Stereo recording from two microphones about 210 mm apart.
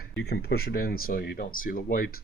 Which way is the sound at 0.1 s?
55° left (ahead or behind).